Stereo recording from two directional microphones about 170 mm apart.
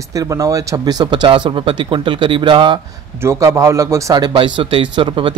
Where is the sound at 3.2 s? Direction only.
15° right (ahead or behind).